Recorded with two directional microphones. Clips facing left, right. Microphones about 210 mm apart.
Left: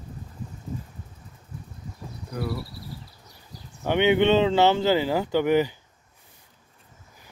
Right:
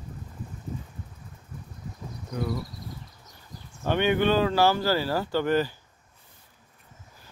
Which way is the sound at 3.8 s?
20° left (ahead or behind).